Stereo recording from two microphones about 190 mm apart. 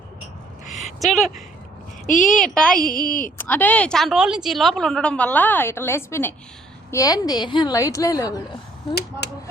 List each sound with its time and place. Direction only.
0.9 s a woman's voice: centre (ahead or behind)
2.9 s a woman's voice: 45° left (ahead or behind)
3.3 s a woman's voice: 10° left (ahead or behind)